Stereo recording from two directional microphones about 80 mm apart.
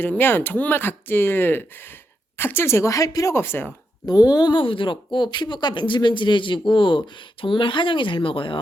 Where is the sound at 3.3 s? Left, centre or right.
Left.